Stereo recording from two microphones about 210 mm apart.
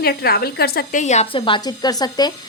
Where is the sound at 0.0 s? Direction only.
45° left (ahead or behind).